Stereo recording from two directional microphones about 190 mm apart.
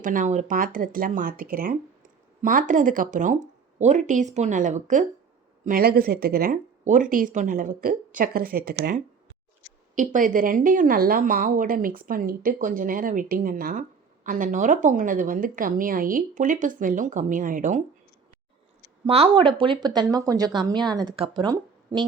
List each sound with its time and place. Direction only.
0.0 s speech: 45° right (ahead or behind)
19.0 s speech: 30° right (ahead or behind)